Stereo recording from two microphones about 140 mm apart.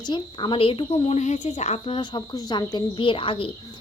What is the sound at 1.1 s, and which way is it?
A woman's voice, 55° left (ahead or behind).